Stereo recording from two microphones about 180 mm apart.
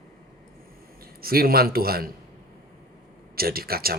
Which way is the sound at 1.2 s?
55° right (ahead or behind).